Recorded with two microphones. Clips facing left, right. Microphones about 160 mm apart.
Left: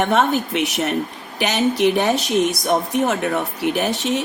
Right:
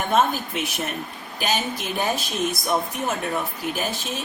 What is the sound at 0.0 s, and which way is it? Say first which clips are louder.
Speech: left 4 dB; 75° left (ahead or behind).